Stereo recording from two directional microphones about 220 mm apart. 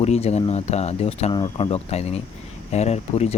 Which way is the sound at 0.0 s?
30° left (ahead or behind).